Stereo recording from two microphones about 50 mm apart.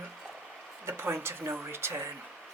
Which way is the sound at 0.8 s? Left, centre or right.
Right.